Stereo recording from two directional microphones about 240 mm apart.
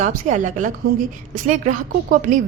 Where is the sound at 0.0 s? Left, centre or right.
Right.